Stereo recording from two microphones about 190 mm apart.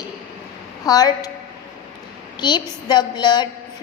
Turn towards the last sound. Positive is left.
turn(degrees=20)  # may be behind; listen again after turning